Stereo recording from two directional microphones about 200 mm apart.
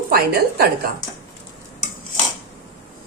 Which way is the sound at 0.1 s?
50° right (ahead or behind).